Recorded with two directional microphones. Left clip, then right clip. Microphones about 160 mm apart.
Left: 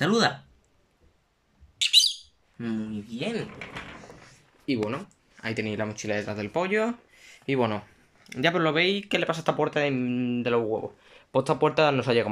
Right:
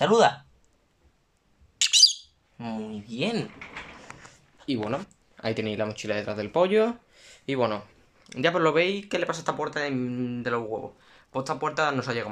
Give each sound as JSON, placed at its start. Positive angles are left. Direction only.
{"t": 0.0, "sound": "speech", "side_deg": -10}
{"t": 1.8, "sound": "bird", "side_deg": -30}
{"t": 2.6, "sound": "speech", "side_deg": -15}
{"t": 4.6, "sound": "speech", "side_deg": -20}